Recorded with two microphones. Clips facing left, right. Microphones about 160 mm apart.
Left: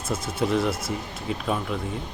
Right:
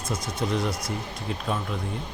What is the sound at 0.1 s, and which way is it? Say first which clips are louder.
Speech: left 3 dB; 25° left (ahead or behind).